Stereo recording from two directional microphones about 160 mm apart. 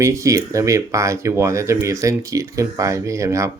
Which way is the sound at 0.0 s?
20° right (ahead or behind).